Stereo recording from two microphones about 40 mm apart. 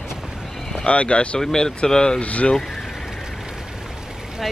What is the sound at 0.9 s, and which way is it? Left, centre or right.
Speech, left.